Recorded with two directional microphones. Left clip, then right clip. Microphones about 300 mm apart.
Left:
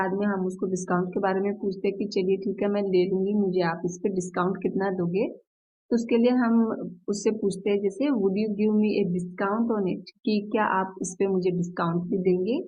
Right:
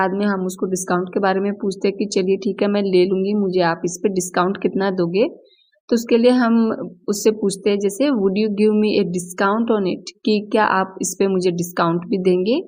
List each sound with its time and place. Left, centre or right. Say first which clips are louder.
0.0 s speech: right 7 dB; right